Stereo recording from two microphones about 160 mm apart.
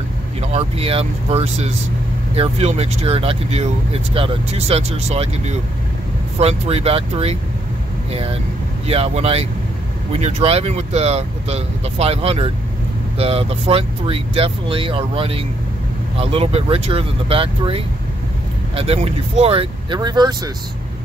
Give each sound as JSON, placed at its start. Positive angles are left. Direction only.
{"t": 0.4, "sound": "speech", "side_deg": -40}